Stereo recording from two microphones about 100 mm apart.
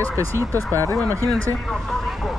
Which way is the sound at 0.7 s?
20° left (ahead or behind).